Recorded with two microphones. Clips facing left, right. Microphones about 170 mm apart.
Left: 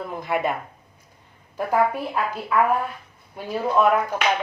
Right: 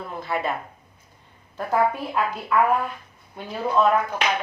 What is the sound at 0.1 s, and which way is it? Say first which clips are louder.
Speech: left 2 dB; 15° left (ahead or behind).